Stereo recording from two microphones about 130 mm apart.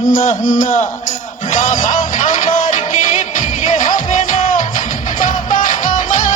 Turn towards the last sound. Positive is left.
turn(degrees=90)